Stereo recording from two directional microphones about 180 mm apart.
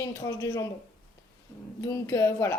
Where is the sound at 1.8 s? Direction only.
15° left (ahead or behind).